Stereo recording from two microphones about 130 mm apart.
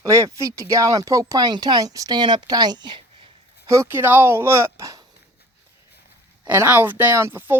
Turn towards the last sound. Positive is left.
turn(degrees=-20)  # may be behind; listen again after turning